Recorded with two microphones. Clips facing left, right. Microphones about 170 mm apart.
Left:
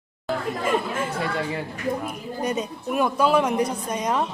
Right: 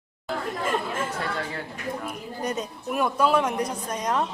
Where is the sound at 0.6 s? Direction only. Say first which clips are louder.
Left 3 dB; centre (ahead or behind).